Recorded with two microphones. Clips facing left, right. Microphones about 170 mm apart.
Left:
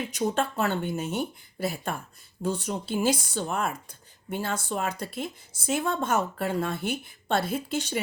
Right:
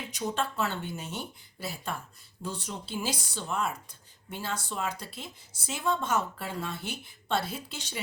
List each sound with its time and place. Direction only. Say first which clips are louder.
0.0 s speech: left 5 dB; 50° left (ahead or behind)